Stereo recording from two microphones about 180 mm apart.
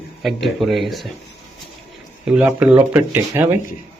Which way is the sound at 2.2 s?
5° right (ahead or behind).